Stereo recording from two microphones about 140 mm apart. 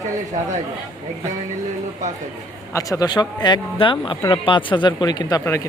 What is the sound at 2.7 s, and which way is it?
Speech, 25° left (ahead or behind).